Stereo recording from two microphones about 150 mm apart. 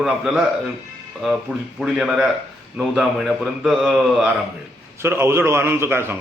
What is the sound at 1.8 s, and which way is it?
A man's voice, centre (ahead or behind).